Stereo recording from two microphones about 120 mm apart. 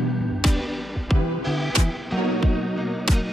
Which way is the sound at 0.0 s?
Centre (ahead or behind).